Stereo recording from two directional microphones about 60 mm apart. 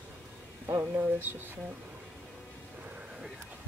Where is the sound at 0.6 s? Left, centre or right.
Right.